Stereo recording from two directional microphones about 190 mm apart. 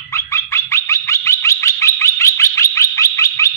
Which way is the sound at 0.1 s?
15° left (ahead or behind).